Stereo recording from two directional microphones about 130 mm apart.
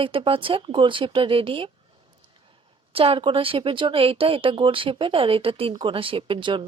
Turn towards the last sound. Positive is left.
turn(degrees=-40)  # may be behind; listen again after turning